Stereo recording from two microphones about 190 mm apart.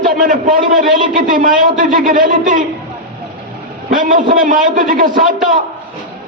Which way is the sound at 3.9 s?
45° right (ahead or behind).